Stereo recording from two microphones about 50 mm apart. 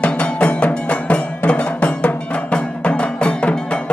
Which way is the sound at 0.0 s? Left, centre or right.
Left.